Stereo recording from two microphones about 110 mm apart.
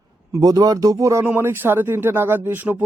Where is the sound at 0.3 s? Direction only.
30° right (ahead or behind).